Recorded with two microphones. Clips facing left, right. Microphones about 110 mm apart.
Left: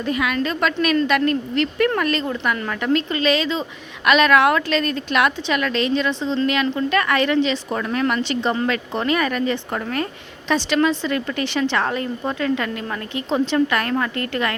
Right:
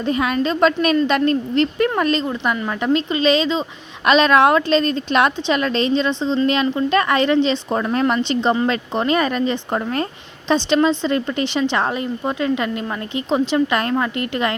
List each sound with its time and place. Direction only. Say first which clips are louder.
0.0 s speech: right 3 dB; 30° right (ahead or behind)